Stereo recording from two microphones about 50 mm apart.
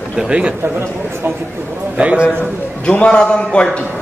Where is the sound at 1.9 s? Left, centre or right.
Right.